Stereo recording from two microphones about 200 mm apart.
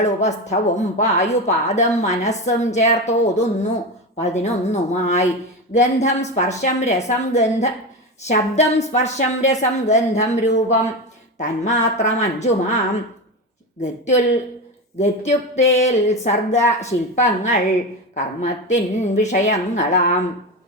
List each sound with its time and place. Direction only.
0.0 s a woman's voice: 35° left (ahead or behind)
13.8 s a woman's voice: 35° left (ahead or behind)